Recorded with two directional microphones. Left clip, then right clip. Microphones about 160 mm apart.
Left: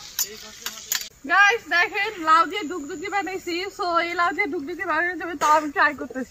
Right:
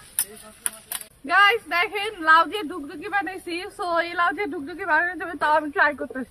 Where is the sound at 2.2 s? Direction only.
25° right (ahead or behind).